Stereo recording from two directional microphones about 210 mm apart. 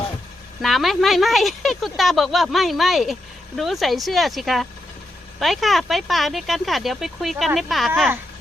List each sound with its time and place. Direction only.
0.6 s speech: centre (ahead or behind)